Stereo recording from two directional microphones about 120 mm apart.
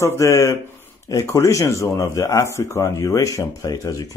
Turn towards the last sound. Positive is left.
turn(degrees=30)  # may be behind; listen again after turning